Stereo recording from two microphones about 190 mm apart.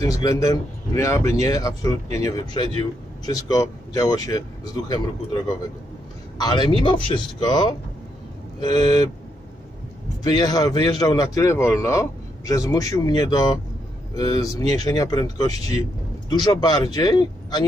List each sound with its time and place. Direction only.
0.0 s a man's voice: 20° left (ahead or behind)
6.3 s a man's voice: 20° left (ahead or behind)
10.2 s a man's voice: 20° left (ahead or behind)